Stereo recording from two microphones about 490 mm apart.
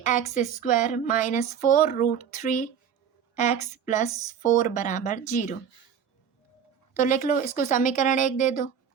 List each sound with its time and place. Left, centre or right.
0.0 s speech: centre
7.0 s speech: centre